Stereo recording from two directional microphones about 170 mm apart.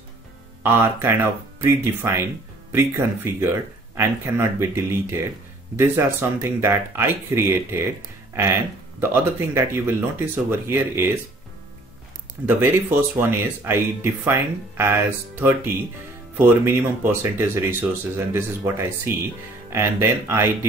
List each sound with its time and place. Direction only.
0.7 s speech: 15° right (ahead or behind)
9.0 s speech: 15° right (ahead or behind)
12.4 s speech: 10° right (ahead or behind)